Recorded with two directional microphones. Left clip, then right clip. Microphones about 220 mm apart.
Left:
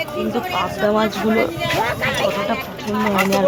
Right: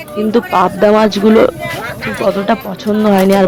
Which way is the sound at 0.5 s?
40° right (ahead or behind).